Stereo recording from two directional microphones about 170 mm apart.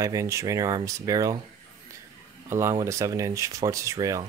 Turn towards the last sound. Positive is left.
turn(degrees=-20)  # may be behind; listen again after turning